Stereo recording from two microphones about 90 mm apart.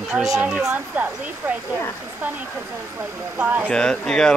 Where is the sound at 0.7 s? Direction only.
15° right (ahead or behind).